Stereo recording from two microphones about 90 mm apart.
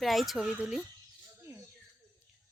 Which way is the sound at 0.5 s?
15° right (ahead or behind).